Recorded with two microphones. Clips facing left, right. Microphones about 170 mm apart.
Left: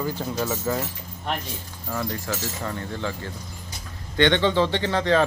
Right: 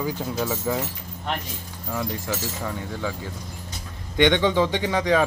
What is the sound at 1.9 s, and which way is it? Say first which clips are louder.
Speech: even; 10° right (ahead or behind).